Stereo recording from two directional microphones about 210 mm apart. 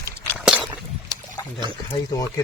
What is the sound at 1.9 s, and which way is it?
Speech, 20° left (ahead or behind).